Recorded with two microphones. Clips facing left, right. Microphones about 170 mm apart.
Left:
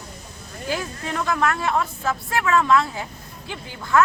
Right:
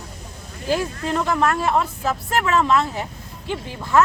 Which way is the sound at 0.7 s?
30° right (ahead or behind).